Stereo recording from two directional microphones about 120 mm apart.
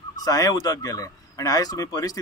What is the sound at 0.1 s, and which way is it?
Speech, 30° left (ahead or behind).